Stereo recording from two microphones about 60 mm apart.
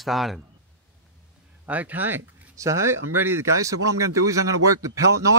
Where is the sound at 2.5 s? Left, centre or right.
Right.